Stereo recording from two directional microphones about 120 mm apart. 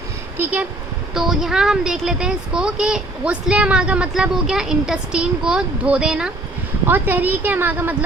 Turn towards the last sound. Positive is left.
turn(degrees=-15)  # may be behind; listen again after turning